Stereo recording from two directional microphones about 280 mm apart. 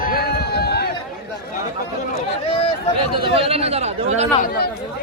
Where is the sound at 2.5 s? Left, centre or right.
Left.